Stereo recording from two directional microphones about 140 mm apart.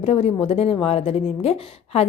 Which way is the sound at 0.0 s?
50° left (ahead or behind).